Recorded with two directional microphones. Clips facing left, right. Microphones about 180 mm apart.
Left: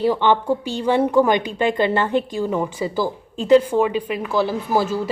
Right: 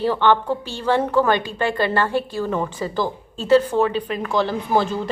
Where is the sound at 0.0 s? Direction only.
15° left (ahead or behind).